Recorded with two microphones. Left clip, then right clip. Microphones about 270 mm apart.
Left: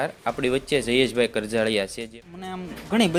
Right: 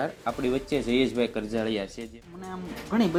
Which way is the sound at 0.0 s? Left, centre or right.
Left.